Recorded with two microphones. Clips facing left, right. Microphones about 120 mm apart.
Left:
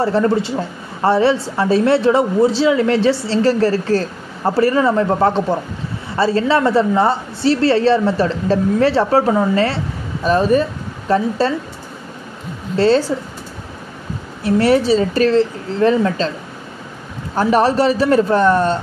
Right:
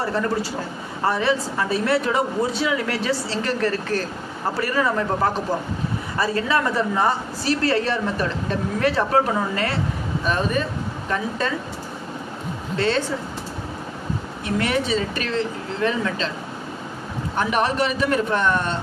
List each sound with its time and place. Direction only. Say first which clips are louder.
0.0 s a woman's voice: left 8 dB; 30° left (ahead or behind)
12.7 s speech: left 9 dB; 35° left (ahead or behind)
14.4 s speech: left 10 dB; 35° left (ahead or behind)
17.4 s speech: left 7 dB; 35° left (ahead or behind)